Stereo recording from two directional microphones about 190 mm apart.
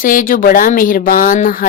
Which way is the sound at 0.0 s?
45° left (ahead or behind).